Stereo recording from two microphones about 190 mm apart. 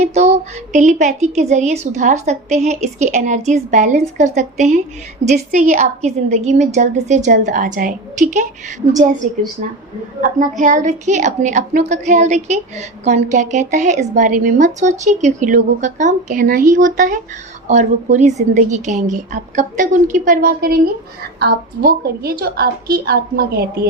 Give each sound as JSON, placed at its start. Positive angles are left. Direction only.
{"t": 0.0, "sound": "a woman's voice", "side_deg": -35}
{"t": 10.2, "sound": "a woman's voice", "side_deg": -40}